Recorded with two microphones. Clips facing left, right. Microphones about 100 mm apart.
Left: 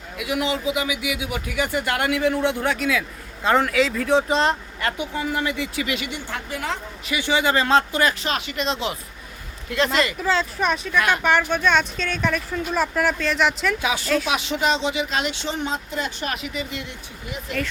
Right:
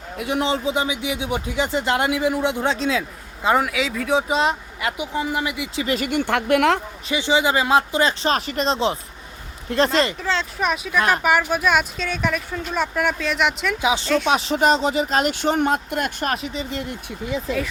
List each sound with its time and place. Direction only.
0.2 s speech: 30° right (ahead or behind)
3.4 s speech: 10° right (ahead or behind)
5.8 s speech: 35° right (ahead or behind)
6.1 s speech: 60° right (ahead or behind)
7.1 s speech: 20° right (ahead or behind)
8.2 s speech: 35° right (ahead or behind)
10.2 s speech: 5° left (ahead or behind)
13.8 s speech: 20° right (ahead or behind)
14.3 s speech: 35° right (ahead or behind); by 16.3 s 55° right (ahead or behind)
16.3 s speech: 35° right (ahead or behind)